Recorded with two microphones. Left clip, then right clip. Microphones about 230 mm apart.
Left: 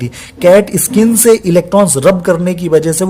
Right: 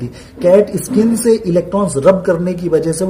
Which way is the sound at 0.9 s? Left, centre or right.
Left.